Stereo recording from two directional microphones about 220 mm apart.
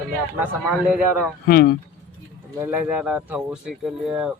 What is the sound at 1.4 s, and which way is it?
Speech, 45° left (ahead or behind).